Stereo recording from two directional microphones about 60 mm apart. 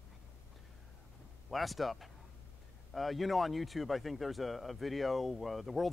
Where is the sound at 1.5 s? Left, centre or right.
Centre.